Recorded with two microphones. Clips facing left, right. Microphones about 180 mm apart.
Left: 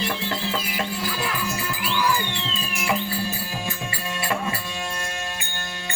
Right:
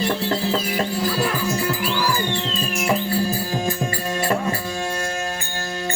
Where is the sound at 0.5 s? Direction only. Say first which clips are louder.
Right 5 dB; 35° right (ahead or behind).